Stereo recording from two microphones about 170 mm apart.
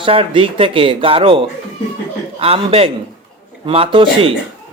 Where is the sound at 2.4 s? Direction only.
35° right (ahead or behind).